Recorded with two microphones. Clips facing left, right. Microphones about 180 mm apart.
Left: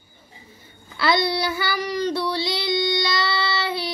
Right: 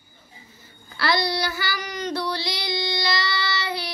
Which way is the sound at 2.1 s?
25° left (ahead or behind).